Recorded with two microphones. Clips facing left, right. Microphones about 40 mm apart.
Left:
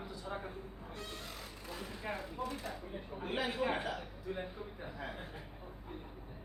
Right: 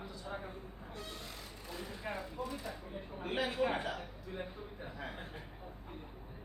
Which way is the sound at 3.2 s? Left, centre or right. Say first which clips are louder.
Right 1 dB; centre.